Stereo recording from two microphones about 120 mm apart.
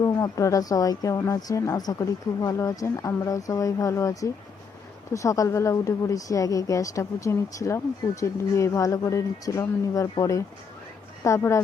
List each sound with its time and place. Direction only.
0.0 s speech: 25° left (ahead or behind)